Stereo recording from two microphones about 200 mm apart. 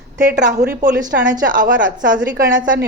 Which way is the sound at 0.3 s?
50° right (ahead or behind).